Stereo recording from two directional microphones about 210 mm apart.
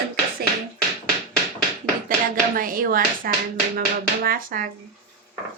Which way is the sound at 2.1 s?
40° right (ahead or behind).